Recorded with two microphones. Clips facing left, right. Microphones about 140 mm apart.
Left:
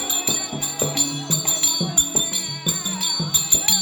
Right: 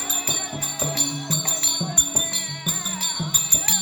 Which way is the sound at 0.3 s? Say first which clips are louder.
Left 3 dB; 20° left (ahead or behind).